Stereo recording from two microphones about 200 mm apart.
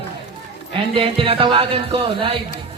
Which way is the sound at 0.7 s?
25° right (ahead or behind).